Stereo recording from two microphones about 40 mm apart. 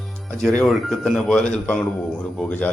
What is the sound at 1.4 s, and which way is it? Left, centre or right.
Speech, left.